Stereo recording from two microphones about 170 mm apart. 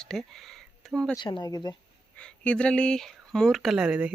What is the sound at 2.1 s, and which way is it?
Speech, 5° left (ahead or behind).